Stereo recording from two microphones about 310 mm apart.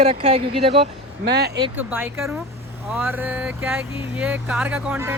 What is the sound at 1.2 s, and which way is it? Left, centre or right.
Speech, right.